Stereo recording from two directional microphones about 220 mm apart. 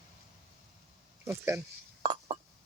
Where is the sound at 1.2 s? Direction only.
10° right (ahead or behind).